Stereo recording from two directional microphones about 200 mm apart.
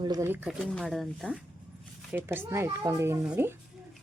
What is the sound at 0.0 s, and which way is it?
Speech, 15° right (ahead or behind).